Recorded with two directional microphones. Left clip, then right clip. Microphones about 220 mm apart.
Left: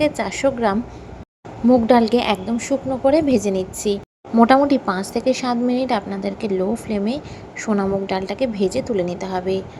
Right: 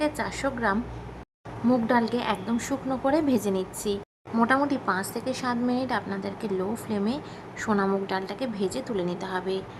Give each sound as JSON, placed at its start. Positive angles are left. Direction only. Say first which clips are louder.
{"t": 0.0, "sound": "a woman's voice", "louder": "left 9 dB", "side_deg": 15}
{"t": 1.9, "sound": "a woman's voice", "louder": "left 9 dB", "side_deg": 20}